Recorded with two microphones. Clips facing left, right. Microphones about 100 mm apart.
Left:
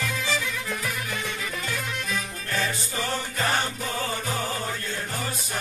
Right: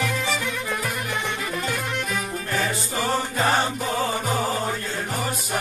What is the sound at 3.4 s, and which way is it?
Music, 40° right (ahead or behind).